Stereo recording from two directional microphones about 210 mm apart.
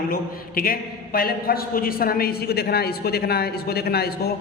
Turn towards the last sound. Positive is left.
turn(degrees=50)  # may be behind; listen again after turning